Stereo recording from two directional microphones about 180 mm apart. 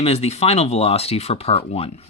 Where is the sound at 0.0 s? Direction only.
35° left (ahead or behind).